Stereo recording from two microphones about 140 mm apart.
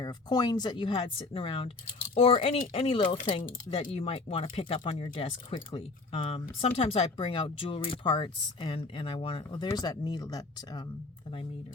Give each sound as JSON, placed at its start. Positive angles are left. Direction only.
{"t": 0.0, "sound": "speech", "side_deg": 30}